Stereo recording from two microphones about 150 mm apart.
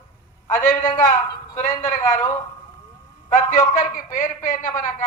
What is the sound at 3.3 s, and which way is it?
A man's voice, 55° left (ahead or behind).